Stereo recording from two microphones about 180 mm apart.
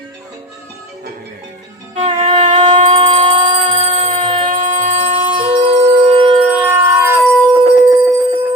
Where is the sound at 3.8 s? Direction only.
35° right (ahead or behind).